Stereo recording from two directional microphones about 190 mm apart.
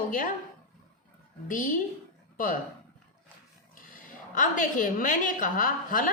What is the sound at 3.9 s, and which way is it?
A woman's voice, 45° left (ahead or behind).